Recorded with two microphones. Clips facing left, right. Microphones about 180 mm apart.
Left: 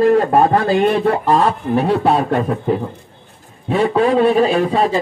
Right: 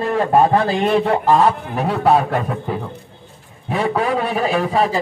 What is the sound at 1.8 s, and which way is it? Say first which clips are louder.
Speech: left 1 dB; 30° left (ahead or behind).